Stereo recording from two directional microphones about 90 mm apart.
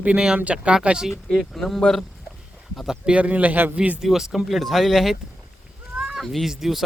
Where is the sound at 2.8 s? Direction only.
10° right (ahead or behind).